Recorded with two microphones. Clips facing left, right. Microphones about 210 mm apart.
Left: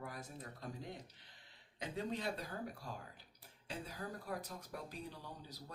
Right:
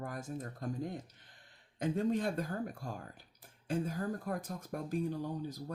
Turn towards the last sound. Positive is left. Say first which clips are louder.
# right 12 dB
turn(degrees=-50)  # may be behind; listen again after turning